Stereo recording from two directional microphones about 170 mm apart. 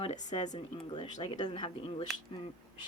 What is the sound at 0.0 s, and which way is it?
Speech, 40° left (ahead or behind).